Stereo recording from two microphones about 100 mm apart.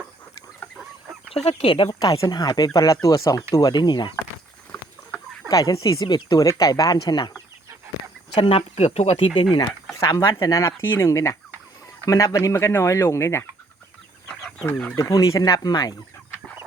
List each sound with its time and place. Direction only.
1.3 s speech: 90° left; by 1.9 s 60° left (ahead or behind)
1.9 s speech: 40° left (ahead or behind)
5.5 s speech: 35° left (ahead or behind)
8.4 s speech: 75° left (ahead or behind); by 9.6 s 50° left (ahead or behind)
9.9 s speech: 35° left (ahead or behind)
14.9 s speech: 35° left (ahead or behind)